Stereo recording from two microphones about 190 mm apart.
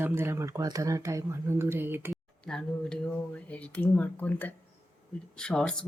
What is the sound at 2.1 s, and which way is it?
Speech, 5° left (ahead or behind).